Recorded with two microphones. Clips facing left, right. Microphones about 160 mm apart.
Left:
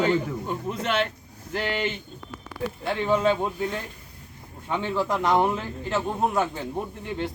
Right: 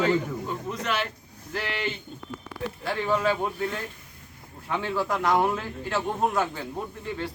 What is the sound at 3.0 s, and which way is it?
Speech, 20° left (ahead or behind).